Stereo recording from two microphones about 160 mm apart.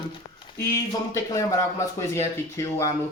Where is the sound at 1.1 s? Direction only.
20° left (ahead or behind).